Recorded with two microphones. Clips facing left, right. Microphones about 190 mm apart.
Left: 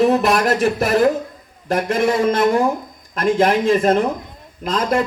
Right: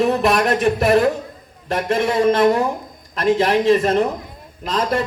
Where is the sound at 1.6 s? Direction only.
45° left (ahead or behind).